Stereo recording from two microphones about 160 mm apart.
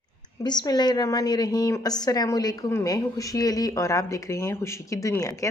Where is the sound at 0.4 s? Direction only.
25° left (ahead or behind).